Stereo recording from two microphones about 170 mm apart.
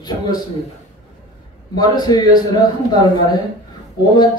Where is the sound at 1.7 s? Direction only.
25° left (ahead or behind).